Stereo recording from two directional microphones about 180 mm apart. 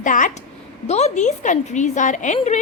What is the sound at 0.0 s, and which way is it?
A woman's voice, 45° left (ahead or behind).